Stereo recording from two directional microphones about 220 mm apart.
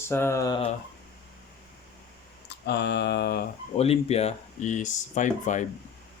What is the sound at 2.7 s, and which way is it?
Mantra, 50° left (ahead or behind).